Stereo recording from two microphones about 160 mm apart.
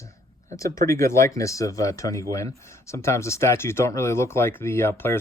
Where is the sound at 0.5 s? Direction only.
20° left (ahead or behind).